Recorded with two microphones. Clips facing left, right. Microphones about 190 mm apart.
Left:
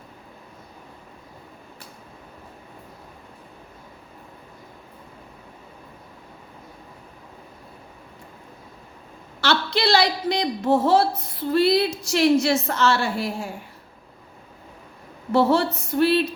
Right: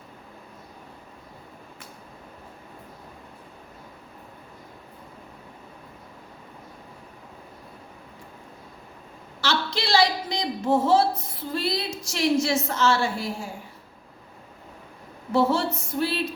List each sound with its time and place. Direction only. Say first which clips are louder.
9.4 s a woman's voice: left 5 dB; 65° left (ahead or behind)
15.3 s speech: left 3 dB; 65° left (ahead or behind)